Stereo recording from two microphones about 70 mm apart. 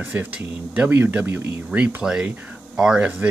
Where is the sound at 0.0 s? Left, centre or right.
Centre.